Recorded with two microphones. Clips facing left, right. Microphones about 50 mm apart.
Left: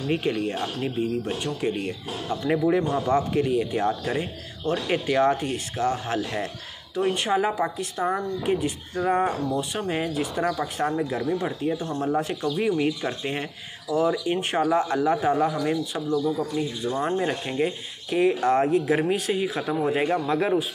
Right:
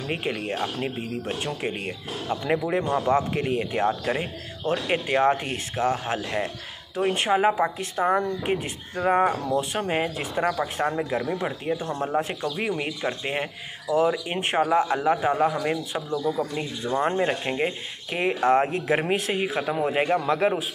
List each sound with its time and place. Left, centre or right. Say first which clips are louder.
0.1 s speech: left 3 dB; right
3.4 s speech: left 1 dB; right
3.8 s speech: right 1 dB; right
7.0 s speech: right 1 dB; right
10.3 s speech: right 1 dB; centre
14.6 s speech: right 2 dB; centre